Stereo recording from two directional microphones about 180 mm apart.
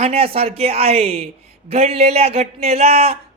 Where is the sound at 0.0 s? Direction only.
35° right (ahead or behind).